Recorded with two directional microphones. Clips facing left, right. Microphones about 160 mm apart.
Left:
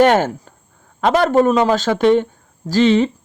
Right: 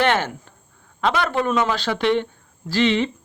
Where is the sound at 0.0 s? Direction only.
40° left (ahead or behind).